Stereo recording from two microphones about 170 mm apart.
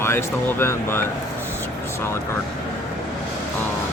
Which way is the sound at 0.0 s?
15° left (ahead or behind).